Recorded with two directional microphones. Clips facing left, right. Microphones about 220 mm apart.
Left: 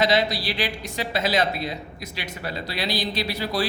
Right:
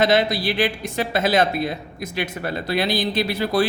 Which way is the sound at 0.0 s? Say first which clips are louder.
Right 4 dB; 50° right (ahead or behind).